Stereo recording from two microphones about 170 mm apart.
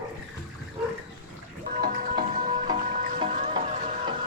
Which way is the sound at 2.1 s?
25° right (ahead or behind).